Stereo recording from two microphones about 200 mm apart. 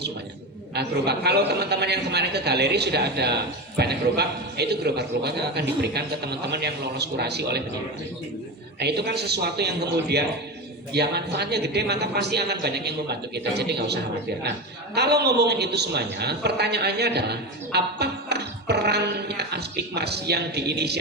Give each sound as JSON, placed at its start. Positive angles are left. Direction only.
{"t": 0.7, "sound": "a man's voice", "side_deg": -55}
{"t": 8.8, "sound": "a man's voice", "side_deg": -55}